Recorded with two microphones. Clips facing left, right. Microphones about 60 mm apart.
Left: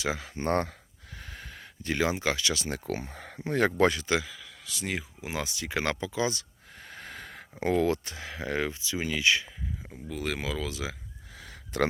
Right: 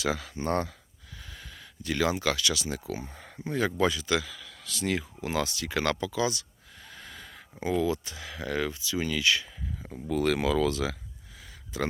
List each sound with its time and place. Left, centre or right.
0.0 s speech: left
1.2 s a sound: left
2.6 s speech: left
3.8 s speech: left
4.0 s speech: left
4.4 s speech: centre
6.8 s a sound: left
7.6 s speech: left
9.9 s speech: centre
11.3 s a sound: left